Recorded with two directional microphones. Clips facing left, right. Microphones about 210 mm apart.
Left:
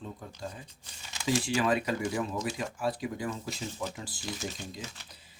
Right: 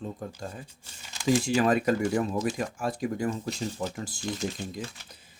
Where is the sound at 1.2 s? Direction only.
45° right (ahead or behind).